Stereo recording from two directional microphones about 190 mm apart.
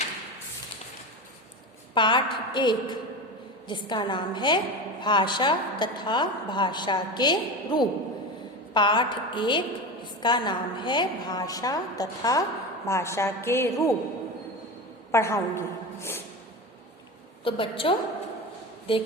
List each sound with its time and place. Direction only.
2.0 s a woman's voice: 25° left (ahead or behind)
15.1 s a woman's voice: 15° left (ahead or behind)
17.4 s a woman's voice: 30° left (ahead or behind)